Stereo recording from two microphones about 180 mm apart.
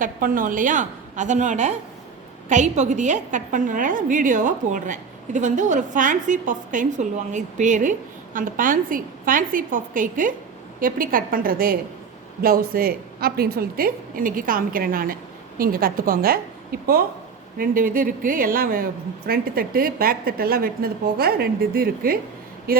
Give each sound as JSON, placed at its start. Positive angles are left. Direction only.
{"t": 0.0, "sound": "a woman's voice", "side_deg": -50}